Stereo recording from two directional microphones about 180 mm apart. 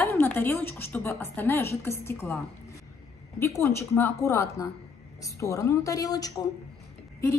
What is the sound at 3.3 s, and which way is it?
A woman's voice, 15° left (ahead or behind).